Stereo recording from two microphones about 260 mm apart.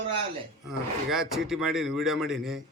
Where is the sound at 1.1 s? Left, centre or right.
Centre.